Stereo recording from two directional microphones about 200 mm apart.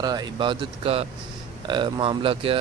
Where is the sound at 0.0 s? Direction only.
20° right (ahead or behind).